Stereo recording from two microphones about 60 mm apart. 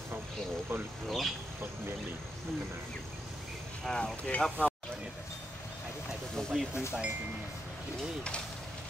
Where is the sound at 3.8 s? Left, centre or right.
Centre.